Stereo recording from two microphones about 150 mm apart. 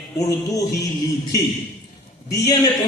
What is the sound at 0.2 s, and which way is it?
Speech, 20° left (ahead or behind).